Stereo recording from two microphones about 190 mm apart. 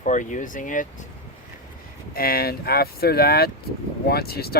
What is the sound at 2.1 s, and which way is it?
Speech, 50° left (ahead or behind).